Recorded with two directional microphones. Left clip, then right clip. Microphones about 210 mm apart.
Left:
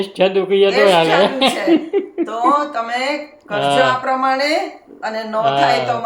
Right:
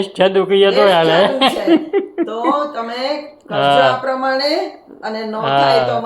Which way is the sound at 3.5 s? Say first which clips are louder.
Right 3 dB; 10° right (ahead or behind).